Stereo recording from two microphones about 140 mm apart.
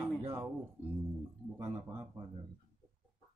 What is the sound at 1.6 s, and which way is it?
Speech, 20° right (ahead or behind).